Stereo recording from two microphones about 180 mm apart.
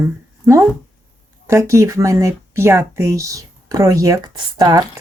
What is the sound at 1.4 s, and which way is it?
Speech, 15° right (ahead or behind).